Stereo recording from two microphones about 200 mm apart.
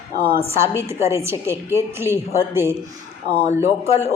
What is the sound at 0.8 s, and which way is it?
A woman's voice, 15° right (ahead or behind).